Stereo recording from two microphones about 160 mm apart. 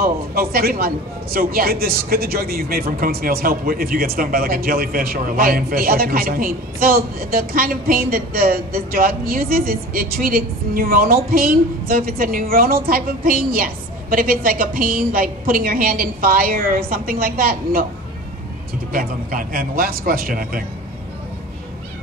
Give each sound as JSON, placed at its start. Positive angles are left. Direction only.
{"t": 0.0, "sound": "a woman's voice", "side_deg": -70}
{"t": 18.9, "sound": "a woman's voice", "side_deg": -60}